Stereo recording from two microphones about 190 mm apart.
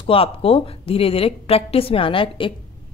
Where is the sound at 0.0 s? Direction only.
30° left (ahead or behind).